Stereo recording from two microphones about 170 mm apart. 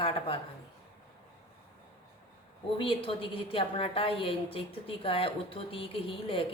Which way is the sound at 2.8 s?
30° left (ahead or behind).